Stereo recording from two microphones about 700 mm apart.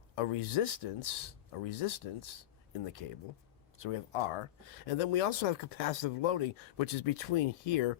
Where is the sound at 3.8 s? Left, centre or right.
Left.